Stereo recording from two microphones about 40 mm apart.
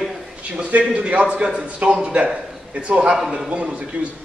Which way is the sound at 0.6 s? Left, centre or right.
Right.